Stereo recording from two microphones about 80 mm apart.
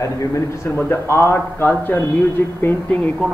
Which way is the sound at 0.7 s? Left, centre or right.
Left.